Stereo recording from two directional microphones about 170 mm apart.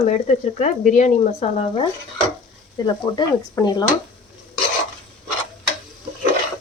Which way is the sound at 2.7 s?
25° left (ahead or behind).